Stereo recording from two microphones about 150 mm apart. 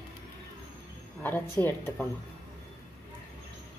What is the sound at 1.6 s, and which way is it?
Speech, 15° left (ahead or behind).